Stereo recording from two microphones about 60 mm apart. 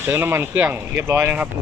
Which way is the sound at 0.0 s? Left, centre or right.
Right.